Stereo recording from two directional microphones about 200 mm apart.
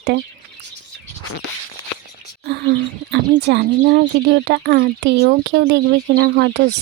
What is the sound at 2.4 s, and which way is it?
Speech, 55° right (ahead or behind).